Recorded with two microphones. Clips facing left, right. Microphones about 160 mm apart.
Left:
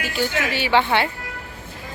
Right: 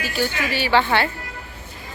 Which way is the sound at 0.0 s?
20° left (ahead or behind).